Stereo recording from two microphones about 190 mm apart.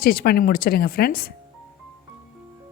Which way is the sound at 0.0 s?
50° left (ahead or behind).